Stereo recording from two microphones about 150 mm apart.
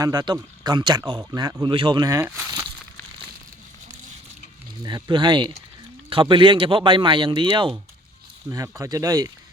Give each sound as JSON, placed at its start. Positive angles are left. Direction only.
{"t": 0.0, "sound": "a man's voice", "side_deg": -25}
{"t": 2.2, "sound": "speech", "side_deg": -15}
{"t": 2.5, "sound": "crumpling", "side_deg": -25}
{"t": 4.8, "sound": "speech", "side_deg": -30}
{"t": 8.4, "sound": "a man's voice", "side_deg": -20}